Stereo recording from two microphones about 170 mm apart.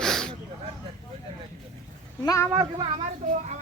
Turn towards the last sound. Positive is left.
turn(degrees=-45)  # may be behind; listen again after turning